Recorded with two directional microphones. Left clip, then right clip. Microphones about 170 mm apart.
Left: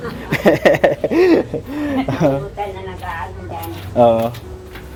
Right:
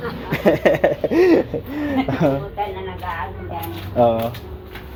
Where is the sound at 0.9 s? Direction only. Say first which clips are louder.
Left 2 dB; 35° left (ahead or behind).